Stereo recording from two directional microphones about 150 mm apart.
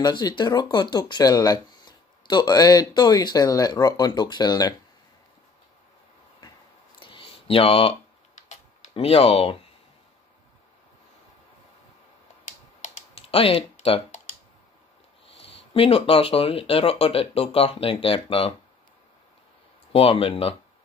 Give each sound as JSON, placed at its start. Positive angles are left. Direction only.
{"t": 0.0, "sound": "speech", "side_deg": 30}
{"t": 7.0, "sound": "a sound", "side_deg": 35}
{"t": 8.4, "sound": "typing", "side_deg": 45}
{"t": 12.4, "sound": "typing", "side_deg": 50}
{"t": 15.3, "sound": "speech", "side_deg": 40}
{"t": 19.9, "sound": "speech", "side_deg": 40}